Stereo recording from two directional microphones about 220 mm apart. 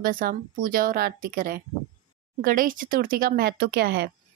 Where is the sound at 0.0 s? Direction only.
40° right (ahead or behind).